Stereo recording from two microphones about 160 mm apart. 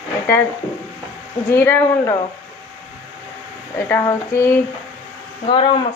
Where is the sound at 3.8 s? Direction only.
20° left (ahead or behind).